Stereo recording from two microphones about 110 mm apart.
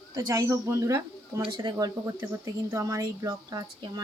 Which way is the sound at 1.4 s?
40° right (ahead or behind).